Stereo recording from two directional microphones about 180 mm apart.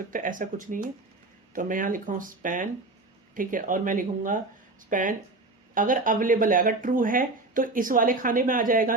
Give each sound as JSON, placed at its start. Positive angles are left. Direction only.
{"t": 0.1, "sound": "speech", "side_deg": -50}